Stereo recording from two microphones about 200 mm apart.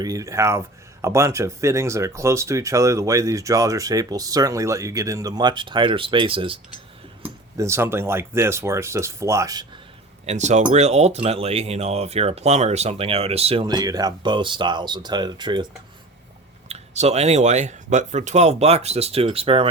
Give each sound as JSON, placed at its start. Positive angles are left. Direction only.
{"t": 0.0, "sound": "speech", "side_deg": -15}
{"t": 7.2, "sound": "speech", "side_deg": -15}
{"t": 10.2, "sound": "speech", "side_deg": -35}
{"t": 13.7, "sound": "speech", "side_deg": -20}
{"t": 16.6, "sound": "speech", "side_deg": -35}